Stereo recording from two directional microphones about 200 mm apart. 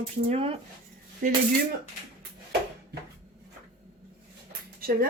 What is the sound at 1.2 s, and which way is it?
Speech, 45° right (ahead or behind).